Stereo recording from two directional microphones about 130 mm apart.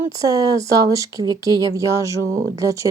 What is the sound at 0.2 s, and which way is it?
Speech, 30° right (ahead or behind).